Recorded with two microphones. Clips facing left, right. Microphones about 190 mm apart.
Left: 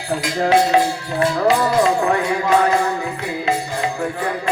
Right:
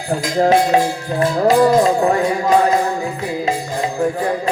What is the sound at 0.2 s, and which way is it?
Music, 40° right (ahead or behind).